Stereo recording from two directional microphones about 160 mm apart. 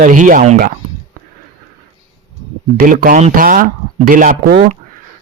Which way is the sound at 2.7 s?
60° right (ahead or behind).